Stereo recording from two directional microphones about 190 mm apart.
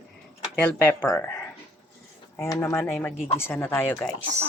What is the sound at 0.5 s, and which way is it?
Speech, 5° left (ahead or behind).